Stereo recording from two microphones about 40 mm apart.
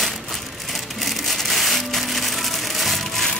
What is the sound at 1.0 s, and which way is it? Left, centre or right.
Music, centre.